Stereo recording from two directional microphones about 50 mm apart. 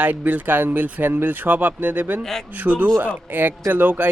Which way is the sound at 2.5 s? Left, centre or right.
Right.